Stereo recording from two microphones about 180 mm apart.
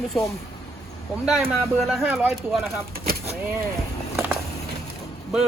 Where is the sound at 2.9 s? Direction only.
55° right (ahead or behind).